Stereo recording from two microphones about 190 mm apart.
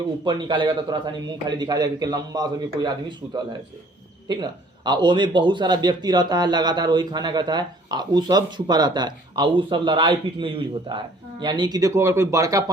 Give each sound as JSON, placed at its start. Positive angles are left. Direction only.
{"t": 0.3, "sound": "a man's voice", "side_deg": -25}